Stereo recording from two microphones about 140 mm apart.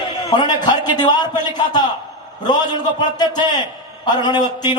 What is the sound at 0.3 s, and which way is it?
A man's voice, 30° left (ahead or behind).